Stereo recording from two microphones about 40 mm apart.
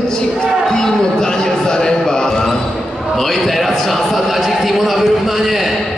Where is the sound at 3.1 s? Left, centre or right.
Centre.